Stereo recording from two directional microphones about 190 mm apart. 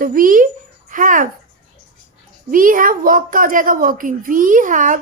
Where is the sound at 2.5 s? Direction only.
45° right (ahead or behind).